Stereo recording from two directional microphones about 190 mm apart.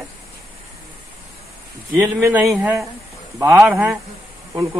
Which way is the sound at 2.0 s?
10° right (ahead or behind).